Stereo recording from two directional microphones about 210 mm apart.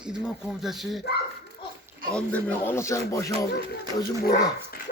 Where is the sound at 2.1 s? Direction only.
5° left (ahead or behind).